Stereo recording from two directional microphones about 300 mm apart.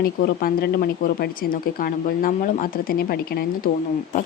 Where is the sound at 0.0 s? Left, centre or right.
Left.